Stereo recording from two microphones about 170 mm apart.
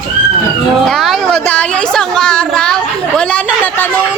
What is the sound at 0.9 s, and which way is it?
A woman's voice, centre (ahead or behind).